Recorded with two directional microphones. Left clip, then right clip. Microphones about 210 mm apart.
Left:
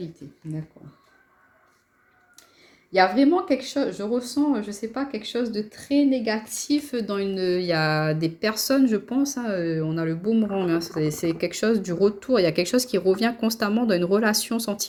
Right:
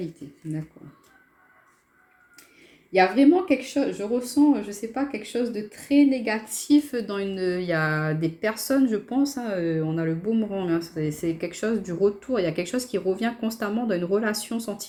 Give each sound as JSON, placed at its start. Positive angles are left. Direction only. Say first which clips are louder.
{"t": 2.9, "sound": "speech", "louder": "even", "side_deg": 35}